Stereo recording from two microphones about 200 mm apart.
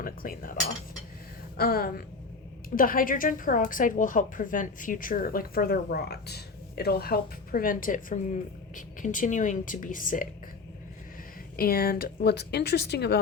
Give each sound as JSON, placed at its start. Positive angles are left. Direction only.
{"t": 0.0, "sound": "a woman's voice", "side_deg": 45}
{"t": 1.5, "sound": "a woman's voice", "side_deg": 50}
{"t": 11.5, "sound": "a woman's voice", "side_deg": 50}